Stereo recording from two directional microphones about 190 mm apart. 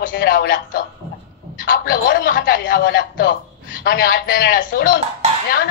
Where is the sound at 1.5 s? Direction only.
45° left (ahead or behind).